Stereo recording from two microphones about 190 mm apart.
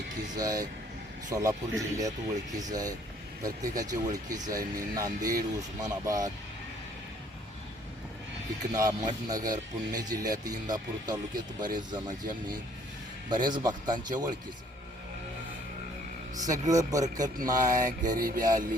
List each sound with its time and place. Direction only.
0.3 s speech: 20° right (ahead or behind)
8.7 s speech: 20° right (ahead or behind)
13.3 s speech: 20° right (ahead or behind)
16.5 s speech: 20° right (ahead or behind)
18.2 s music: 50° right (ahead or behind)